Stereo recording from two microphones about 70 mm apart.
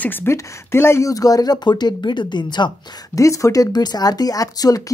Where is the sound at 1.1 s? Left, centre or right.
Left.